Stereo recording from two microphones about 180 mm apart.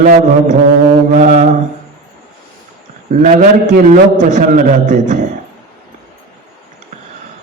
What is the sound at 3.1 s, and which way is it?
A man's voice, 45° right (ahead or behind).